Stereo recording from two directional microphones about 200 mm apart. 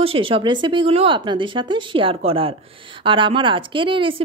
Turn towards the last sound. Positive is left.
turn(degrees=-25)  # may be behind; listen again after turning